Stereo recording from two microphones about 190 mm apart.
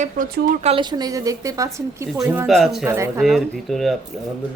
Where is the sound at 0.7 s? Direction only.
20° right (ahead or behind).